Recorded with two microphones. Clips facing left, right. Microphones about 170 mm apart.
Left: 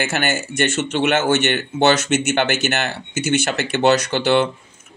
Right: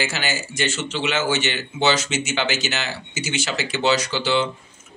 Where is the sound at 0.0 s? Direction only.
55° left (ahead or behind).